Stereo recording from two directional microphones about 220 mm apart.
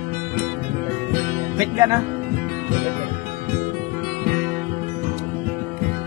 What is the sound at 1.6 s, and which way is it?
Speech, 15° right (ahead or behind).